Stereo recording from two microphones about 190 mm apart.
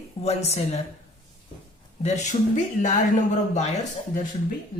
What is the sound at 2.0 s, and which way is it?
Speech, 40° left (ahead or behind).